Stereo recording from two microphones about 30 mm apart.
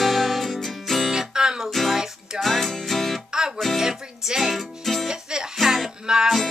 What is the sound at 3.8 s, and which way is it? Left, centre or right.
Music, centre.